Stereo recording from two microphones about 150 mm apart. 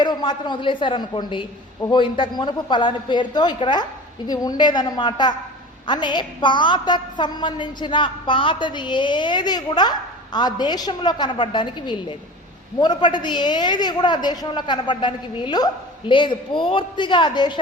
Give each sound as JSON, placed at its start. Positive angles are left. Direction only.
{"t": 0.0, "sound": "a woman's voice", "side_deg": 30}